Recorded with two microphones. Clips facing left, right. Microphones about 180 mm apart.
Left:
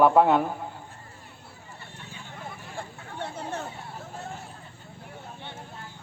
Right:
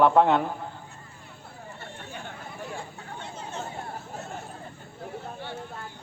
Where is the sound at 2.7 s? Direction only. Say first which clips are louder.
Even; 60° left (ahead or behind).